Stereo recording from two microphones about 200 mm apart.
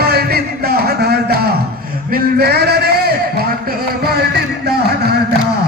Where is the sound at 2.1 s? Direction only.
50° right (ahead or behind).